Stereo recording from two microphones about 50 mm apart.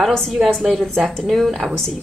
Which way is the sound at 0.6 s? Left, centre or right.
Centre.